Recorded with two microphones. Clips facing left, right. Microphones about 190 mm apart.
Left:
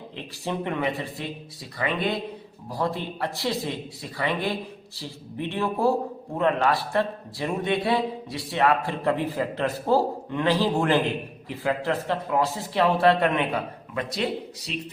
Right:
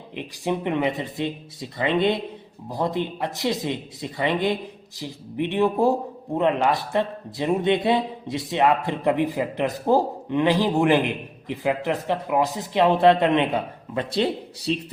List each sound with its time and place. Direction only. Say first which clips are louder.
0.2 s a man's voice: right 4 dB; 20° right (ahead or behind)